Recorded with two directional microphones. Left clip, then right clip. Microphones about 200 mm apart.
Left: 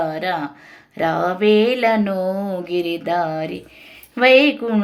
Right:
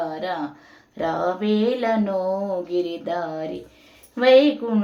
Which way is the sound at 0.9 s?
25° left (ahead or behind).